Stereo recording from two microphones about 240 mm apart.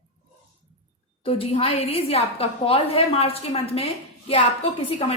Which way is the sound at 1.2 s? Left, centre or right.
Left.